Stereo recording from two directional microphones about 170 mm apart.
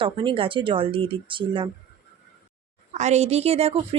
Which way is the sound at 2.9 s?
40° right (ahead or behind).